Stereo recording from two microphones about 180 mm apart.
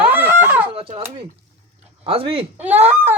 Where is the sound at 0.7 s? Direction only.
35° right (ahead or behind).